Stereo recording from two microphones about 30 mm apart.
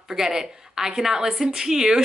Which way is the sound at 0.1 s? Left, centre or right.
Centre.